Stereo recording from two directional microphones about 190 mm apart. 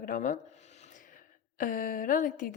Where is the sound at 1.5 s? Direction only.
45° left (ahead or behind).